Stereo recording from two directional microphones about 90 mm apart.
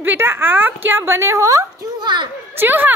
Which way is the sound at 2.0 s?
60° right (ahead or behind).